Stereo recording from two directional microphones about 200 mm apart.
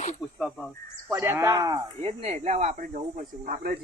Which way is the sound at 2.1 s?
30° right (ahead or behind).